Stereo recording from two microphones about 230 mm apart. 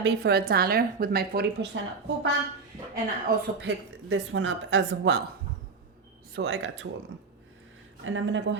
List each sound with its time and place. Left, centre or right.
0.0 s a woman's voice: right
2.9 s speech: right
6.3 s speech: right
8.0 s speech: right